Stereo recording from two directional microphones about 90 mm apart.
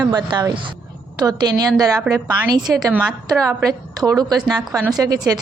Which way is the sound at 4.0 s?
45° right (ahead or behind).